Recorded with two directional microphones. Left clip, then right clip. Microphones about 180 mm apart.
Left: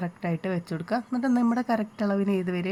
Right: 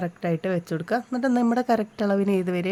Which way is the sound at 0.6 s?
75° right (ahead or behind).